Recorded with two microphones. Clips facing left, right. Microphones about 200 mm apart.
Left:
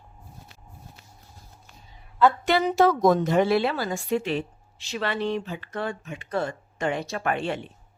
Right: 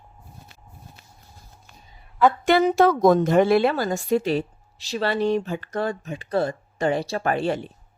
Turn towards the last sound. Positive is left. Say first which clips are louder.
# right 4 dB
turn(degrees=-40)  # may be behind; listen again after turning